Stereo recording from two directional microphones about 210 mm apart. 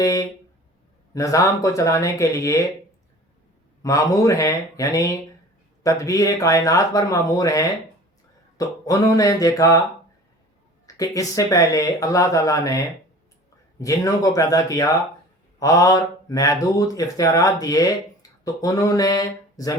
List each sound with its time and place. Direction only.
0.0 s speech: 15° left (ahead or behind)
3.8 s speech: 15° left (ahead or behind)
10.8 s speech: 15° left (ahead or behind)